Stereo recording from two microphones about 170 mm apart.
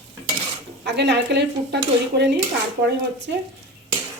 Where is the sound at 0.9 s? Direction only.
90° right.